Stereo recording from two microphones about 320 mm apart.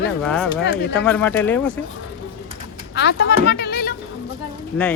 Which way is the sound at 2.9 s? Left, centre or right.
Left.